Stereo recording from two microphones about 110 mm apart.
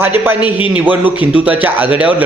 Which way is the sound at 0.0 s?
20° right (ahead or behind).